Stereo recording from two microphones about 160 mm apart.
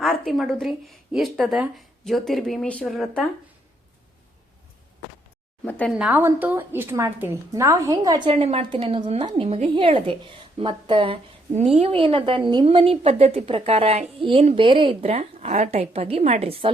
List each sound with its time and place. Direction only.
0.0 s speech: centre (ahead or behind)
5.6 s speech: 10° left (ahead or behind)
6.0 s a woman's voice: 10° right (ahead or behind)
8.3 s a woman's voice: 40° right (ahead or behind)